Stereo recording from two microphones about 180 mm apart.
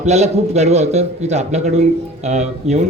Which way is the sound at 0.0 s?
35° right (ahead or behind).